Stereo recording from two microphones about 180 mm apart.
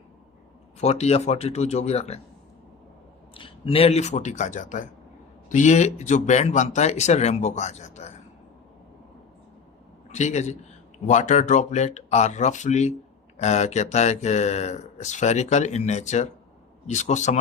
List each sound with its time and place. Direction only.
0.8 s speech: 35° left (ahead or behind)
3.3 s speech: 30° left (ahead or behind)
10.1 s speech: 40° left (ahead or behind)